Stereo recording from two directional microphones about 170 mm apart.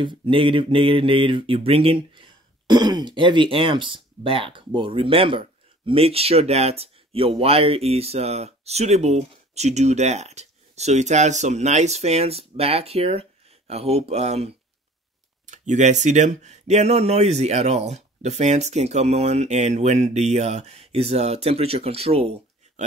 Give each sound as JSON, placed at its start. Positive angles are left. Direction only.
{"t": 0.0, "sound": "speech", "side_deg": -30}